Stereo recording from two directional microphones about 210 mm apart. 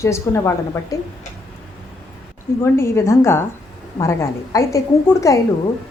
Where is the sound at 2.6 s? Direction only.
10° left (ahead or behind).